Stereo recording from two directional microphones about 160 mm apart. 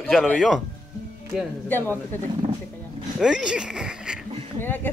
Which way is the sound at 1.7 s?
10° left (ahead or behind).